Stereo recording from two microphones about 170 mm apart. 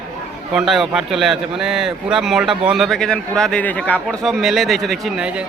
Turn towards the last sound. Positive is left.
turn(degrees=-5)  # may be behind; listen again after turning